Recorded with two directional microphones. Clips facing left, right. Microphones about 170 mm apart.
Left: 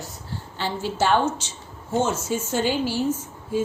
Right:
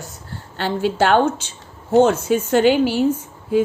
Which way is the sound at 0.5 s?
60° right (ahead or behind).